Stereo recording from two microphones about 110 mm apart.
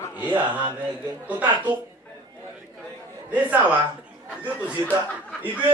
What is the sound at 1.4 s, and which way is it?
Speech, 40° right (ahead or behind).